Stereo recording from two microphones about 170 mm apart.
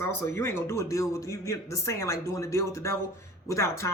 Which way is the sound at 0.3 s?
15° left (ahead or behind).